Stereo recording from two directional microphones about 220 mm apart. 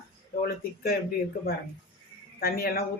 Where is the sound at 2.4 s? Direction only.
40° left (ahead or behind).